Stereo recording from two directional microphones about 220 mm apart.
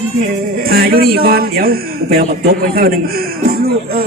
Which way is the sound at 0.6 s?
45° right (ahead or behind).